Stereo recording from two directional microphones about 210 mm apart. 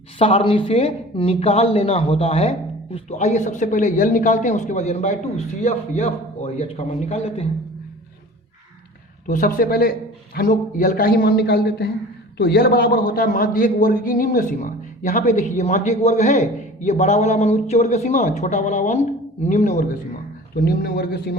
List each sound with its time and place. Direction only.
0.2 s a man's voice: 25° left (ahead or behind)
9.2 s a man's voice: 40° left (ahead or behind)
20.6 s a man's voice: 45° left (ahead or behind)